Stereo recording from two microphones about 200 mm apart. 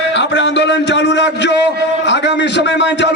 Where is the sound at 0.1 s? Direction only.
60° left (ahead or behind).